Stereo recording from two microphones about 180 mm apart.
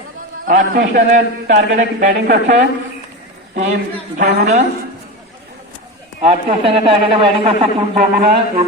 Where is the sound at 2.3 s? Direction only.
70° right (ahead or behind).